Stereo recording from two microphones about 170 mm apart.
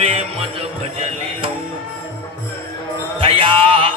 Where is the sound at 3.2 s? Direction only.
30° right (ahead or behind).